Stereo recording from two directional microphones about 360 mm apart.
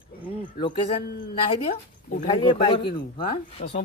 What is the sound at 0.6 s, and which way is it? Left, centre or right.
Speech, left.